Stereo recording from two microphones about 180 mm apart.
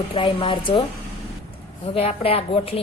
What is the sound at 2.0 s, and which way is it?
Speech, 35° left (ahead or behind).